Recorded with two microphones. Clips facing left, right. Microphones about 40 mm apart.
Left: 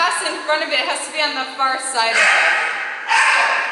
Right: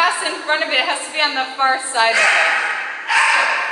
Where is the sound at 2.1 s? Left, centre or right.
Centre.